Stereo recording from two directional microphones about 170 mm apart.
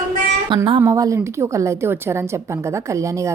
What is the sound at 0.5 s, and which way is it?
A woman's voice, 30° right (ahead or behind).